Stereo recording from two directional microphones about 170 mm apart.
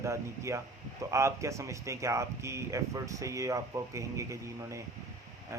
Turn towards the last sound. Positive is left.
turn(degrees=-15)  # may be behind; listen again after turning